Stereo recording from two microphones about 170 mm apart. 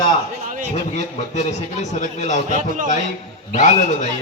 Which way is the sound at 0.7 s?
40° left (ahead or behind).